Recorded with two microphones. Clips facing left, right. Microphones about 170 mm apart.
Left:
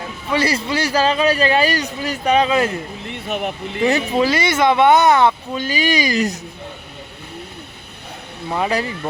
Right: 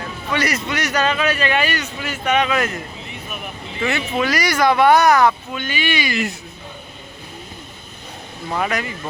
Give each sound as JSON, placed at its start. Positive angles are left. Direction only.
{"t": 0.3, "sound": "a man's voice", "side_deg": 30}
{"t": 3.1, "sound": "vehicle", "side_deg": 75}
{"t": 3.8, "sound": "speech", "side_deg": 35}
{"t": 8.4, "sound": "speech", "side_deg": 15}